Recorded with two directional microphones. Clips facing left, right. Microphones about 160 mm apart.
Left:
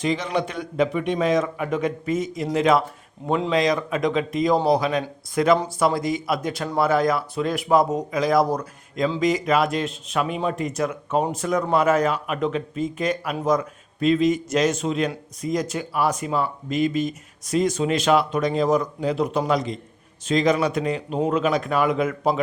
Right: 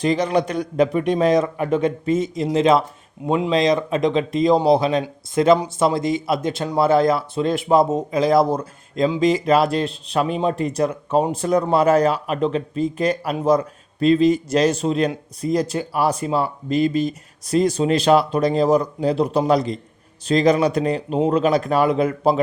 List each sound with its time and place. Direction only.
0.0 s speech: 40° right (ahead or behind)